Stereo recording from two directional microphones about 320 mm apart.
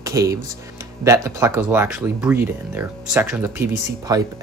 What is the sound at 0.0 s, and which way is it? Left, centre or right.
A man's voice, centre.